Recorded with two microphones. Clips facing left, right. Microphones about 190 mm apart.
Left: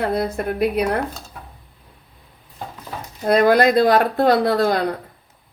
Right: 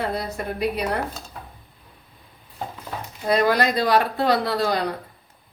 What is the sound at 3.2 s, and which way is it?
A woman's voice, 50° left (ahead or behind).